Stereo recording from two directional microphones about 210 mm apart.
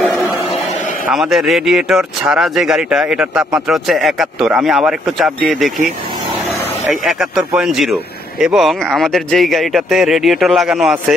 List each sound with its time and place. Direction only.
1.1 s speech: centre (ahead or behind)
6.9 s speech: centre (ahead or behind)